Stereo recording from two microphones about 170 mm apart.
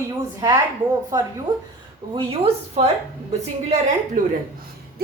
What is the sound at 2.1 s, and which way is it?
A woman's voice, 35° right (ahead or behind).